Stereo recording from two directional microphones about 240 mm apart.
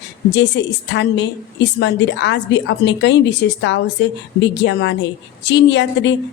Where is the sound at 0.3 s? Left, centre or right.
Left.